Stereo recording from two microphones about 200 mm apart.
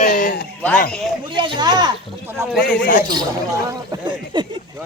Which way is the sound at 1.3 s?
25° right (ahead or behind).